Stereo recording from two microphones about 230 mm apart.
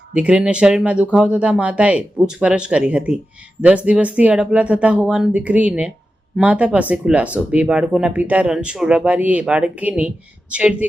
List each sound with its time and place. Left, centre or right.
0.1 s speech: centre